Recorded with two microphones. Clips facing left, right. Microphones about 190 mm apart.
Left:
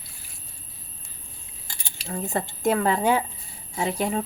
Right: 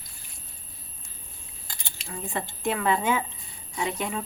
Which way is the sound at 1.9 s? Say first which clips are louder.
Left 5 dB; 40° left (ahead or behind).